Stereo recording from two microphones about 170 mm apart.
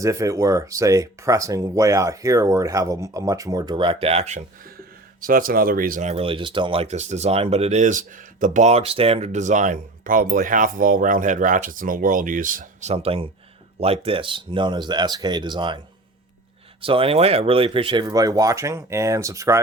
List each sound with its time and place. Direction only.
0.0 s speech: 20° right (ahead or behind); by 4.4 s 40° right (ahead or behind)
4.8 s a man's voice: 55° right (ahead or behind)
6.1 s speech: 35° right (ahead or behind)
16.8 s speech: 30° right (ahead or behind)
18.0 s speech: 20° right (ahead or behind)